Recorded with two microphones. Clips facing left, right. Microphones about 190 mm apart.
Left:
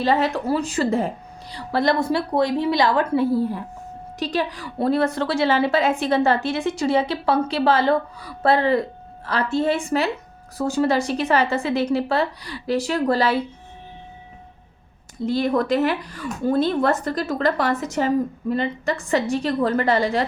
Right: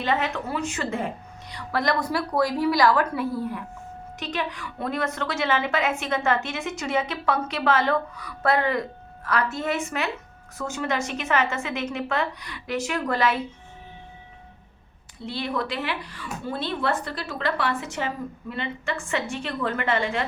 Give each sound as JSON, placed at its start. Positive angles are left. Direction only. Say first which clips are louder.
{"t": 0.0, "sound": "a woman's voice", "louder": "left 6 dB", "side_deg": 35}
{"t": 15.2, "sound": "a woman's voice", "louder": "left 8 dB", "side_deg": 45}